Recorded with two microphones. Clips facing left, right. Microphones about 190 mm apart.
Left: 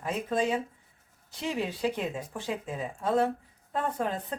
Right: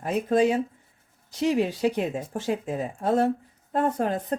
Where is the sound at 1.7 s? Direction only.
40° right (ahead or behind).